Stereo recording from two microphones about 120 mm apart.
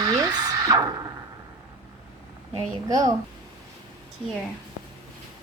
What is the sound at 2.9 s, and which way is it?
Speech, 30° right (ahead or behind).